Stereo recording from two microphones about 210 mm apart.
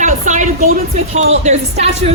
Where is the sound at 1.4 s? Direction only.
30° right (ahead or behind).